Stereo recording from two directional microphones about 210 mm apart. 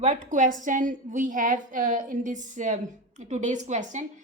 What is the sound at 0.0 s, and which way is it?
A woman's voice, 35° right (ahead or behind).